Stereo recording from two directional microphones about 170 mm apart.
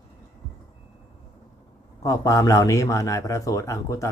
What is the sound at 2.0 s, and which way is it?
A man's voice, 20° left (ahead or behind).